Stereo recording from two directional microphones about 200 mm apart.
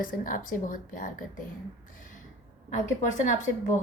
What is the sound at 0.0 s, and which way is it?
A woman's voice, 45° left (ahead or behind).